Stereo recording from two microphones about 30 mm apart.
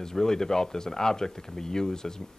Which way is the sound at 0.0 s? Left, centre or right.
Centre.